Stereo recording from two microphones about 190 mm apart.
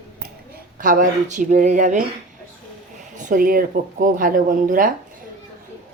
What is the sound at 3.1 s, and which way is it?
Speech, 45° right (ahead or behind).